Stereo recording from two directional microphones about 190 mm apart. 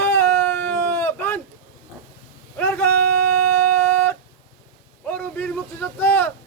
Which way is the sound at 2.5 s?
10° left (ahead or behind).